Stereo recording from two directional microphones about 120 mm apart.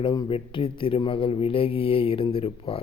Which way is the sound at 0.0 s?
40° left (ahead or behind).